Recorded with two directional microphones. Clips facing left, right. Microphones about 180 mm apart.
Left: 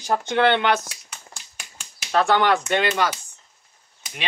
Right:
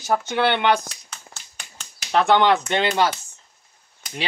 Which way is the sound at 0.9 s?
10° left (ahead or behind).